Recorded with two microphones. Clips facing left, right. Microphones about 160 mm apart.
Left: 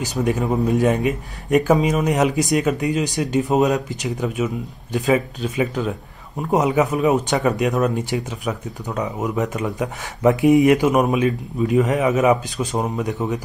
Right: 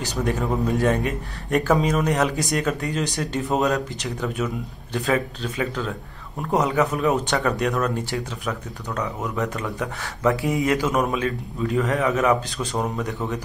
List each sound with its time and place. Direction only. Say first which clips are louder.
0.3 s speech: left 4 dB; 20° left (ahead or behind)